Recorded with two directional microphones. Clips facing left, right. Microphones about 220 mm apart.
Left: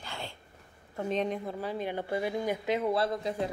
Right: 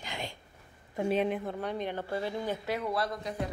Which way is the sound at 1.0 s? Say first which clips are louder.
Right 2 dB; 5° right (ahead or behind).